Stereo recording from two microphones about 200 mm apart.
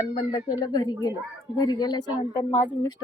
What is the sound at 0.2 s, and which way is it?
A woman's voice, 25° left (ahead or behind).